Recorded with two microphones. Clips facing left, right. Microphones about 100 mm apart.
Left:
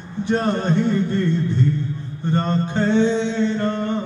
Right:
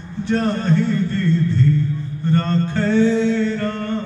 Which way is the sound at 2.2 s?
20° left (ahead or behind).